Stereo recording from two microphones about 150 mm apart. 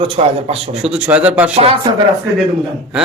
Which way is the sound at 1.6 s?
40° right (ahead or behind).